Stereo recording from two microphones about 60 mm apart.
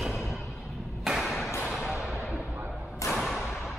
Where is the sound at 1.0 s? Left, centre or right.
Centre.